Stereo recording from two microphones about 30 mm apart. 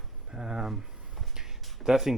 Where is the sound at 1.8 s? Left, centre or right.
Centre.